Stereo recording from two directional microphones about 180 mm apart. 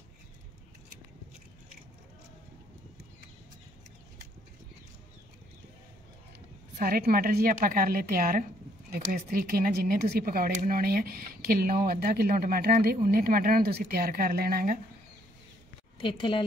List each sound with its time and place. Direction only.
6.8 s speech: 55° right (ahead or behind)
16.0 s a woman's voice: 25° left (ahead or behind)